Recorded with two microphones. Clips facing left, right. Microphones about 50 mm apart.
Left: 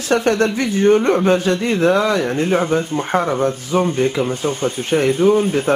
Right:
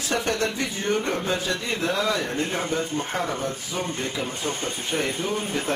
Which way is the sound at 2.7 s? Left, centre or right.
Left.